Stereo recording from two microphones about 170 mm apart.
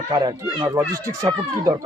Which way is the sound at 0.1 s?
25° right (ahead or behind).